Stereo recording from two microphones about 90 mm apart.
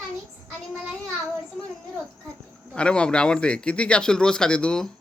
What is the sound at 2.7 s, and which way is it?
A man's voice, 10° left (ahead or behind).